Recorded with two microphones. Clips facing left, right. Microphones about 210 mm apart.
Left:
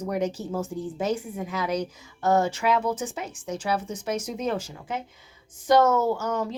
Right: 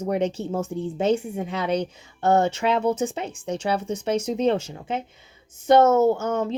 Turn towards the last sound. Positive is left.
turn(degrees=-25)  # may be behind; listen again after turning